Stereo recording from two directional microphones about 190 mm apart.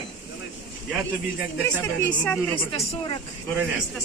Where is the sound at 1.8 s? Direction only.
10° left (ahead or behind).